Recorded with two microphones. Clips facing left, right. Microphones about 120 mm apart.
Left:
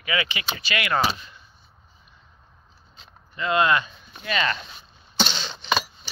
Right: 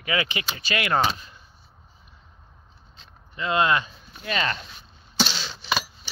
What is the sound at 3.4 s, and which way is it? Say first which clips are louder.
Speech: left 1 dB; 25° right (ahead or behind).